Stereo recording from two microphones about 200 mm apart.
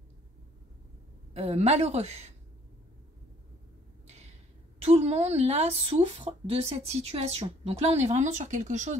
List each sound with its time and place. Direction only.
1.3 s speech: 30° right (ahead or behind)
4.8 s speech: 30° right (ahead or behind)